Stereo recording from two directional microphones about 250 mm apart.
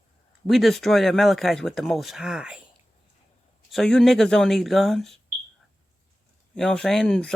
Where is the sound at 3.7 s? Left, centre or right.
Centre.